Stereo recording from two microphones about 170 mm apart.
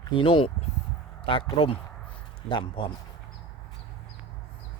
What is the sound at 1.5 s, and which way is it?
Speech, 35° left (ahead or behind).